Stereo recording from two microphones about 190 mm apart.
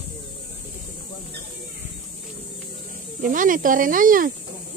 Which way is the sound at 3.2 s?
45° right (ahead or behind).